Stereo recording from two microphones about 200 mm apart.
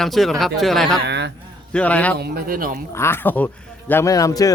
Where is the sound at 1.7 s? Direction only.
5° left (ahead or behind).